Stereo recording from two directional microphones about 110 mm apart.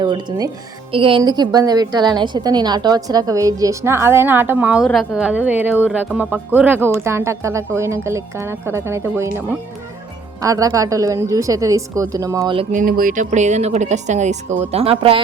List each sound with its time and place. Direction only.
0.0 s speech: 45° right (ahead or behind)
0.9 s speech: 55° right (ahead or behind)
1.2 s a woman's voice: 40° right (ahead or behind); by 4.8 s 15° right (ahead or behind)
4.8 s speech: centre (ahead or behind); by 9.4 s 25° right (ahead or behind)
10.4 s a woman's voice: 30° right (ahead or behind)
13.3 s a woman's voice: 90° right; by 15.2 s 65° right (ahead or behind)